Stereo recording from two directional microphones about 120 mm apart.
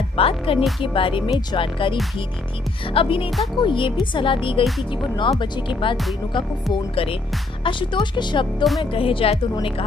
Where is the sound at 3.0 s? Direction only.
50° left (ahead or behind).